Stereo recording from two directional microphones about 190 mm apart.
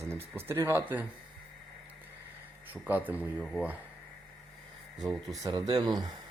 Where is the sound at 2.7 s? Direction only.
10° right (ahead or behind).